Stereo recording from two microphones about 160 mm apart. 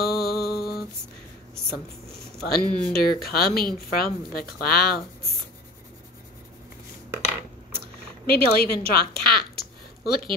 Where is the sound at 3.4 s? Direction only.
70° left (ahead or behind).